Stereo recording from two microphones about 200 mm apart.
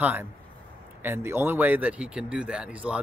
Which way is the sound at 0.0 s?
5° right (ahead or behind).